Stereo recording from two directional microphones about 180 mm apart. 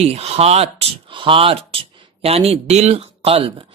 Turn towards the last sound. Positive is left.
turn(degrees=-30)  # may be behind; listen again after turning